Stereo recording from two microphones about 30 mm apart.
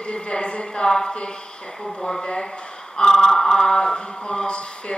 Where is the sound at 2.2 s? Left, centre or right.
Left.